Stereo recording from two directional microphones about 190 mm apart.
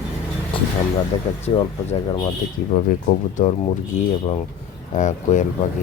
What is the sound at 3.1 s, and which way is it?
Speech, 40° left (ahead or behind).